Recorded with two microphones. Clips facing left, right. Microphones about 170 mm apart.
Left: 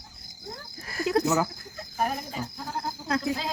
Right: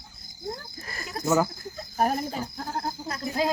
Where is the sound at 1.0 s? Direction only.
80° left.